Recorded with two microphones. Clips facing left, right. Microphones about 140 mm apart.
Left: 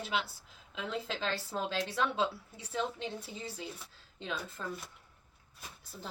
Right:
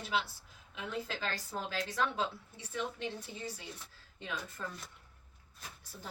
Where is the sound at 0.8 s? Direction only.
20° left (ahead or behind).